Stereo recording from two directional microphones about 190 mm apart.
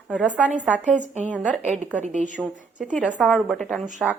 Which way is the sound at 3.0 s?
5° right (ahead or behind).